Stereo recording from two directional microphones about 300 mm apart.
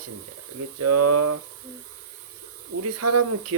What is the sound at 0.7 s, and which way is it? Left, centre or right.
Speech, right.